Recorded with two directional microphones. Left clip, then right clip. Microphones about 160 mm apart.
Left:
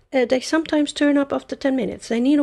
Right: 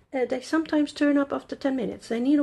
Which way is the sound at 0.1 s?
50° left (ahead or behind).